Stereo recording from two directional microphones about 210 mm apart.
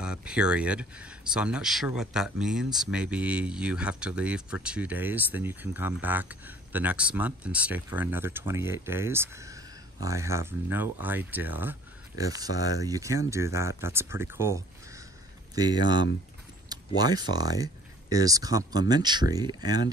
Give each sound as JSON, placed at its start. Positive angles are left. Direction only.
{"t": 0.0, "sound": "speech", "side_deg": -5}